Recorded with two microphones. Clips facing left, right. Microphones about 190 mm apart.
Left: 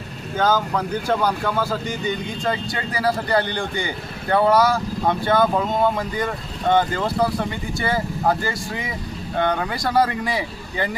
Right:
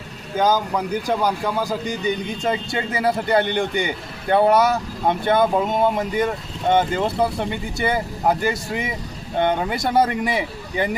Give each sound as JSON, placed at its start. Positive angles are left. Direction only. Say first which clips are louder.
{"t": 0.3, "sound": "a man's voice", "louder": "right 1 dB", "side_deg": -15}